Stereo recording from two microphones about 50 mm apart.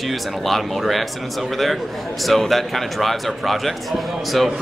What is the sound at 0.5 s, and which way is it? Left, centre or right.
Speech, centre.